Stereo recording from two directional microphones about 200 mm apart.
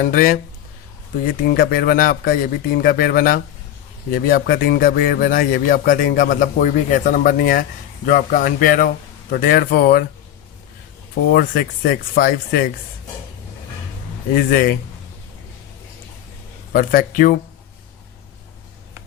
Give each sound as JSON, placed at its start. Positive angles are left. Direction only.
{"t": 0.0, "sound": "speech", "side_deg": 45}
{"t": 1.5, "sound": "speech", "side_deg": 50}
{"t": 11.3, "sound": "speech", "side_deg": 50}
{"t": 14.3, "sound": "speech", "side_deg": 45}
{"t": 16.7, "sound": "speech", "side_deg": 45}